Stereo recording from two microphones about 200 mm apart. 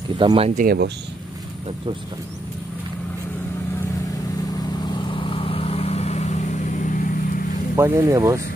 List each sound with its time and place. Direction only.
0.2 s speech: 25° right (ahead or behind)
0.6 s speech: 50° right (ahead or behind)
4.8 s vehicle: 25° left (ahead or behind); by 7.4 s 40° left (ahead or behind)
7.7 s speech: 15° right (ahead or behind)